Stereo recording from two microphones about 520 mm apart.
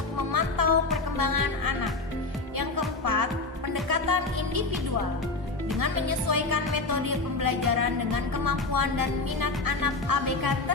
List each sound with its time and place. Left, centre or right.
0.3 s music: right
5.8 s music: right